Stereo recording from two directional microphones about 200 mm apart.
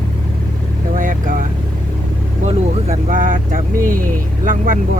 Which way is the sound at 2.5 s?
40° right (ahead or behind).